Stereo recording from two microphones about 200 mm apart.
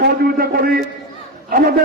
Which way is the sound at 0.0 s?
50° right (ahead or behind).